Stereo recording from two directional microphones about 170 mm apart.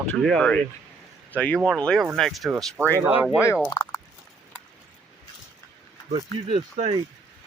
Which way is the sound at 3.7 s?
25° left (ahead or behind).